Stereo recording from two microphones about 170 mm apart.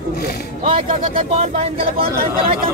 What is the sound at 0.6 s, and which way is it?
Speech, 30° right (ahead or behind).